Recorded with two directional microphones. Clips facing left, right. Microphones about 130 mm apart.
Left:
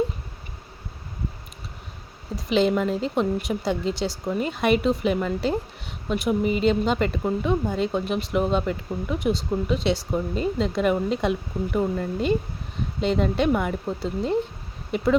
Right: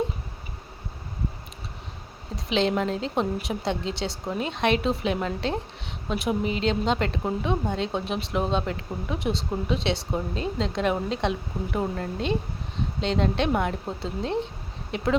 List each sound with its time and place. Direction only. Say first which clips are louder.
2.3 s speech: left 3 dB; centre (ahead or behind)
8.4 s speech: left 3 dB; 30° right (ahead or behind)
8.6 s speech: left 3 dB; centre (ahead or behind)